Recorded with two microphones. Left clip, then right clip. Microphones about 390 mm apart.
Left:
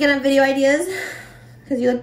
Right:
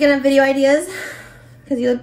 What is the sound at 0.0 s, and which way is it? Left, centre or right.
A woman's voice, centre.